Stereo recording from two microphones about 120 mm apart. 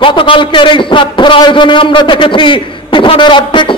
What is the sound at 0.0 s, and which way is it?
A man's voice, 45° left (ahead or behind).